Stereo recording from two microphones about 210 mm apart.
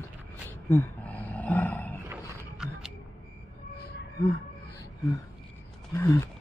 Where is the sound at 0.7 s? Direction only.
10° left (ahead or behind).